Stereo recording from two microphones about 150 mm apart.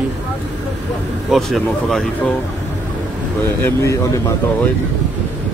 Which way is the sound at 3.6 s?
20° left (ahead or behind).